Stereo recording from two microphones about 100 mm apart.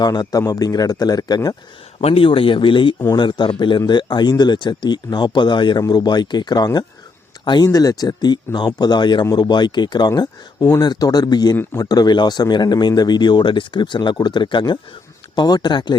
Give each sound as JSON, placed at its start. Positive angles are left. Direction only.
{"t": 0.0, "sound": "speech", "side_deg": 40}
{"t": 2.0, "sound": "speech", "side_deg": 80}
{"t": 10.1, "sound": "speech", "side_deg": 35}